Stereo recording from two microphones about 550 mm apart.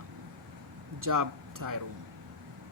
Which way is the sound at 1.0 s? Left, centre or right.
Right.